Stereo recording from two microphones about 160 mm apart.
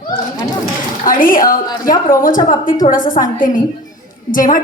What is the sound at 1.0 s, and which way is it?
A woman's voice, 60° left (ahead or behind).